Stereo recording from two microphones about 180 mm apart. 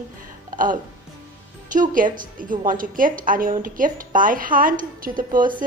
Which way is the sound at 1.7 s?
45° right (ahead or behind).